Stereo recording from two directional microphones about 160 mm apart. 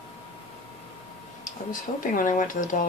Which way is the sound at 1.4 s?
55° left (ahead or behind).